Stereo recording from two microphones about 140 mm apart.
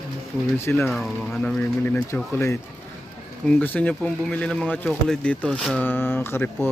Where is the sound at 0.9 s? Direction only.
Centre (ahead or behind).